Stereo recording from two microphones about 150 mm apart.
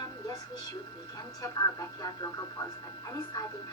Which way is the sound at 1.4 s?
25° left (ahead or behind).